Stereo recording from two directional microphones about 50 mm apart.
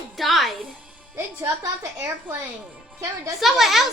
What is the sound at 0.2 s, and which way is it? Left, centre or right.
Music, centre.